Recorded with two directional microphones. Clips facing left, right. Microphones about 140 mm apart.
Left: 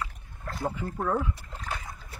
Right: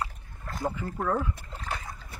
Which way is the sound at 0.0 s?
45° right (ahead or behind).